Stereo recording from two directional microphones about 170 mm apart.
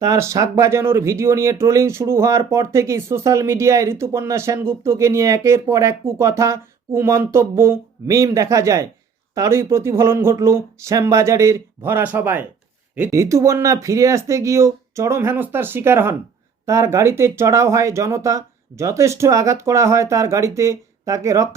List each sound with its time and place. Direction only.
0.0 s speech: 20° right (ahead or behind)